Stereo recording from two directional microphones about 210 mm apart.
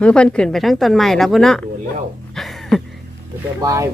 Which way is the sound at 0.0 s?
5° left (ahead or behind).